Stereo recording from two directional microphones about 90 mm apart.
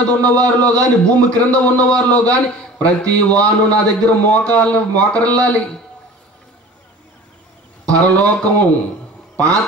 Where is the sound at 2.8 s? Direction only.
15° left (ahead or behind).